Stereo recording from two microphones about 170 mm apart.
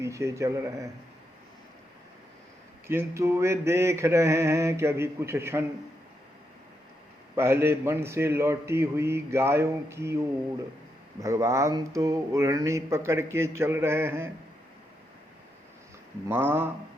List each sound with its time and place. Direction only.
0.0 s speech: 15° right (ahead or behind)
2.8 s speech: 15° right (ahead or behind)
7.3 s speech: 15° right (ahead or behind)
11.2 s speech: 20° right (ahead or behind)
16.3 s speech: 15° right (ahead or behind)